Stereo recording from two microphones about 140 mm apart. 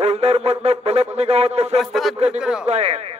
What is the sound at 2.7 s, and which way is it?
Speech, 50° right (ahead or behind).